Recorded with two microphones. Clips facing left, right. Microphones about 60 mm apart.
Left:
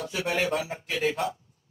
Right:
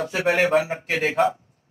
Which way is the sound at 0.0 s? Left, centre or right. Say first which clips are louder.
Right 7 dB; right.